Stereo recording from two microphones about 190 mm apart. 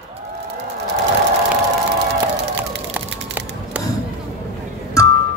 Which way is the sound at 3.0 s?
10° right (ahead or behind).